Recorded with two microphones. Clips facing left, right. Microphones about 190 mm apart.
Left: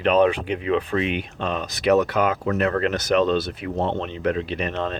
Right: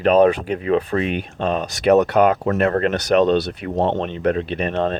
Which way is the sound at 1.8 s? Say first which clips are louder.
Right 5 dB; 60° right (ahead or behind).